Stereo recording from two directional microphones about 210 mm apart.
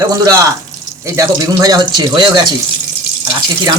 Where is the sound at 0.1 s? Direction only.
20° right (ahead or behind).